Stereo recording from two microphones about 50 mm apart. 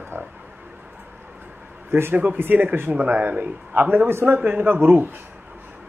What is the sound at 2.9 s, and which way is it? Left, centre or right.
Speech, right.